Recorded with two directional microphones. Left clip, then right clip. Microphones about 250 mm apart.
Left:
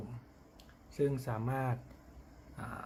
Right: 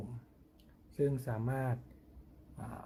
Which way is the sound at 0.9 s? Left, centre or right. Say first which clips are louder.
Left 1 dB; centre.